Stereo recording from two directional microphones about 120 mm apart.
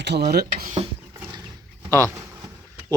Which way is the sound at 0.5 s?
80° right.